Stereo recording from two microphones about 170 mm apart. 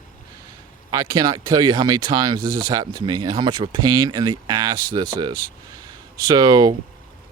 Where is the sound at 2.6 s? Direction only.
25° right (ahead or behind).